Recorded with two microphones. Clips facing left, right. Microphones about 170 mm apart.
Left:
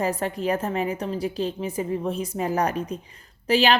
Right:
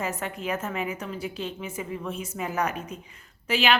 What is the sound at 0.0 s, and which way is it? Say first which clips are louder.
Speech: left 6 dB; 35° left (ahead or behind).